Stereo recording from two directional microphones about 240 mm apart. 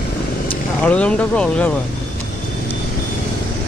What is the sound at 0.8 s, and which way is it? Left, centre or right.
Speech, centre.